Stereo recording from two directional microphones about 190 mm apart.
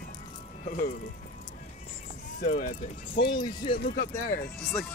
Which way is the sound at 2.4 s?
50° left (ahead or behind).